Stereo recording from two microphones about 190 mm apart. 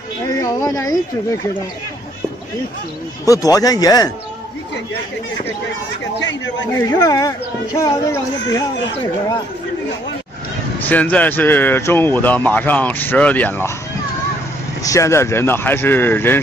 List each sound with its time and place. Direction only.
0.4 s speech: 20° left (ahead or behind)
3.3 s speech: 20° left (ahead or behind)
6.8 s speech: 20° left (ahead or behind)
10.9 s speech: 10° left (ahead or behind)
14.8 s speech: 15° left (ahead or behind)